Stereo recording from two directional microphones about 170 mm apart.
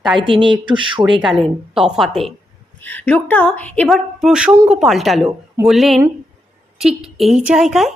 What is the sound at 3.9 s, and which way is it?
A woman's voice, 5° right (ahead or behind).